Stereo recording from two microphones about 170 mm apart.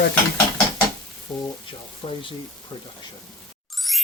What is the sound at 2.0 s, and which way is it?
Speech, 35° left (ahead or behind).